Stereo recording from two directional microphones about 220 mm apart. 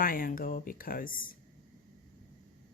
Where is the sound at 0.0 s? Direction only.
40° left (ahead or behind).